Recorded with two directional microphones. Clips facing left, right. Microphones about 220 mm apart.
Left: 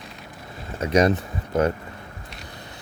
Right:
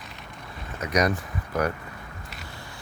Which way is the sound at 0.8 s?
25° left (ahead or behind).